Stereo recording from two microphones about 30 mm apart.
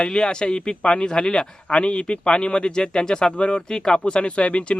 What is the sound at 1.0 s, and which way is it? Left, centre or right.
Speech, left.